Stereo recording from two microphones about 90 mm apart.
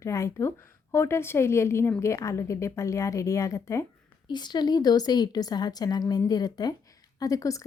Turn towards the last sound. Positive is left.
turn(degrees=40)  # may be behind; listen again after turning